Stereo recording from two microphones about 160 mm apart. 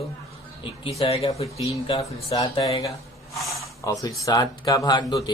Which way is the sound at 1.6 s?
25° left (ahead or behind).